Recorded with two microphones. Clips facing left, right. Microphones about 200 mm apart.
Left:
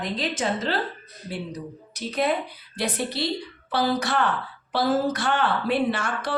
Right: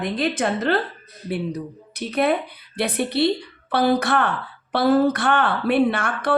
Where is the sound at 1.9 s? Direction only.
60° right (ahead or behind).